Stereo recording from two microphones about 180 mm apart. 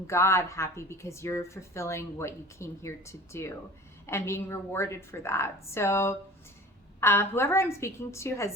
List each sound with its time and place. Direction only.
0.1 s speech: 15° left (ahead or behind)